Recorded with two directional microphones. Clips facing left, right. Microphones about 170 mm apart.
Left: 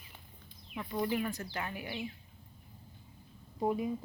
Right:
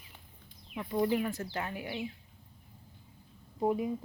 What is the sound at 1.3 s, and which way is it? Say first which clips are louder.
Speech: right 2 dB; 25° right (ahead or behind).